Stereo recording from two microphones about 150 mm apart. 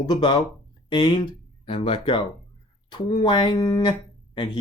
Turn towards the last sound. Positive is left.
turn(degrees=30)  # may be behind; listen again after turning